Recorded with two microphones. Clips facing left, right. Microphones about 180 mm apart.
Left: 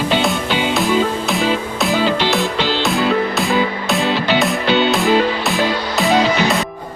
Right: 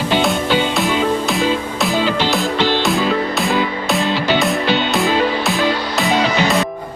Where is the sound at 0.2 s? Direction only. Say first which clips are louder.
Right 2 dB; centre (ahead or behind).